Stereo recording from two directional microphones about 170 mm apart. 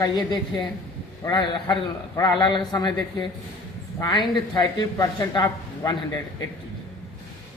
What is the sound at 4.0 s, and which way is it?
A man's voice, 25° left (ahead or behind).